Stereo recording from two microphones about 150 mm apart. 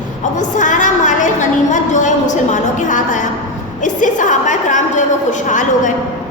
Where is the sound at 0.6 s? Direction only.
55° left (ahead or behind).